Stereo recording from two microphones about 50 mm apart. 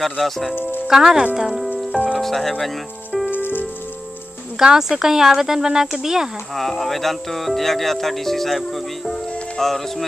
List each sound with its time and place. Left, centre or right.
0.0 s speech: centre
0.6 s speech: left
0.8 s speech: centre
3.3 s rain on surface: left
4.6 s speech: centre
6.5 s speech: centre